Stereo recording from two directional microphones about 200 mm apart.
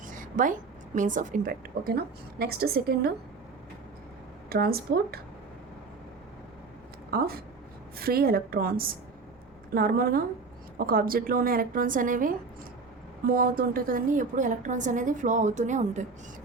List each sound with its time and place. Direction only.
0.1 s a woman's voice: 40° right (ahead or behind)
4.4 s a woman's voice: 50° right (ahead or behind)
7.1 s a woman's voice: 50° right (ahead or behind)